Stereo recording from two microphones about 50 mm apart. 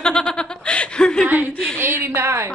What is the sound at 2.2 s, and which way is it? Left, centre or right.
Speech, right.